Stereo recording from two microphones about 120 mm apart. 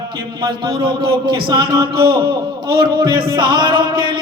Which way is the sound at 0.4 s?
45° right (ahead or behind).